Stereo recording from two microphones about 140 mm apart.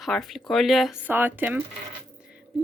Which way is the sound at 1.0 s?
15° right (ahead or behind).